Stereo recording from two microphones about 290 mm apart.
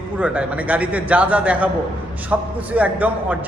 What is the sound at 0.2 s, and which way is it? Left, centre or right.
A man's voice, centre.